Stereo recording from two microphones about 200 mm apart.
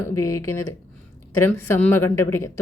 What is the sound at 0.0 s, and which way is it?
A woman's voice, 15° left (ahead or behind).